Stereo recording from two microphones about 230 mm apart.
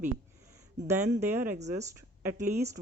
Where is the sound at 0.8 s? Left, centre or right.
Centre.